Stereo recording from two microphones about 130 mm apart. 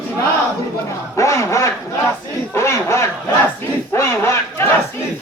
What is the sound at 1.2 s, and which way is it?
Speech, 25° left (ahead or behind).